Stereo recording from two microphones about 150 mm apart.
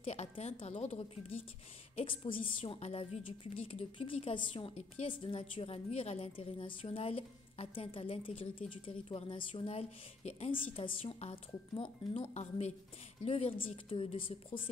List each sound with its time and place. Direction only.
0.0 s a woman's voice: 45° left (ahead or behind)
12.4 s a woman's voice: 50° left (ahead or behind)